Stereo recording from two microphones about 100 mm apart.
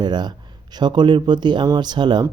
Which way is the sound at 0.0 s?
45° right (ahead or behind).